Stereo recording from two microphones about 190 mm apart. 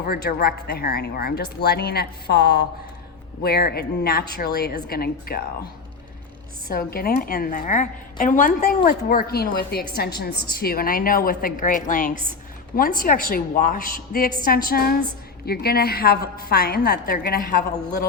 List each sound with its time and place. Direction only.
0.0 s speech: 55° left (ahead or behind)
6.7 s a woman's voice: 55° left (ahead or behind)